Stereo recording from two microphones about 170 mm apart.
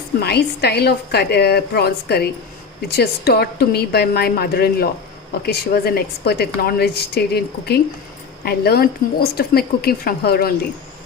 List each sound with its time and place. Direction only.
0.2 s a woman's voice: 70° left (ahead or behind)